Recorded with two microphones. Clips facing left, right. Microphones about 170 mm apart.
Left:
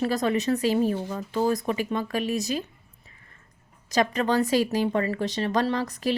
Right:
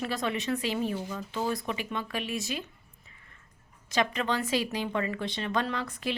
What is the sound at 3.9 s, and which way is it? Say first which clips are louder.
A woman's voice: left 5 dB; 40° left (ahead or behind).